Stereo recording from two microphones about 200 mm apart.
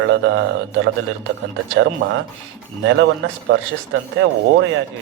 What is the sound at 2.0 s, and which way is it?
Speech, 90° right.